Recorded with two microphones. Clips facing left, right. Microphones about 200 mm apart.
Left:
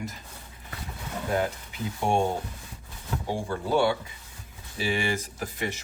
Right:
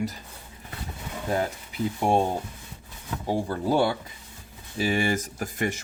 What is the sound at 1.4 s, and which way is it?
Speech, 35° right (ahead or behind).